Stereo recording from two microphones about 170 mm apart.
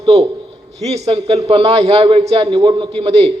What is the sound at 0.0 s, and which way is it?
A man's voice, 35° right (ahead or behind).